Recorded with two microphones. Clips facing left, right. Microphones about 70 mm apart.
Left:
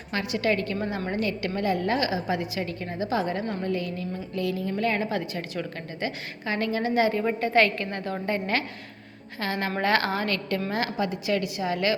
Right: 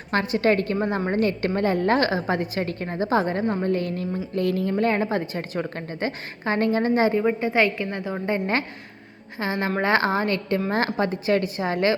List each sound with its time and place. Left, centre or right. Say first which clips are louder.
0.1 s a woman's voice: right 5 dB; right
7.2 s a woman's voice: right 1 dB; centre
9.4 s a woman's voice: right 3 dB; right
10.7 s a woman's voice: right 4 dB; right